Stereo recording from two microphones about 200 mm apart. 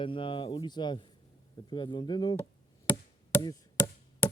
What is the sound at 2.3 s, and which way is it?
Chop, 15° left (ahead or behind).